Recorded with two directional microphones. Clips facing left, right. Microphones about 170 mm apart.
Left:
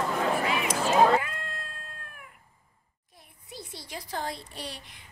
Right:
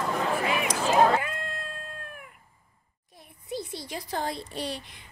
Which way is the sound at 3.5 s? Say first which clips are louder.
Right 6 dB; 20° right (ahead or behind).